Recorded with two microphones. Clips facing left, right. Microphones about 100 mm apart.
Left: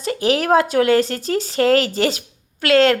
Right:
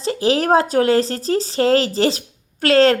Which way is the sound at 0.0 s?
30° right (ahead or behind).